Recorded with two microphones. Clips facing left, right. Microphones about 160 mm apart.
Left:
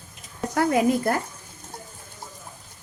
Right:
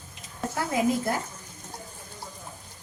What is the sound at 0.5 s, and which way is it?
Speech, 65° left (ahead or behind).